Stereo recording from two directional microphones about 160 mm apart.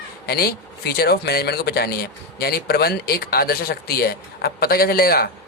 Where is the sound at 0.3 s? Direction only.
75° left (ahead or behind).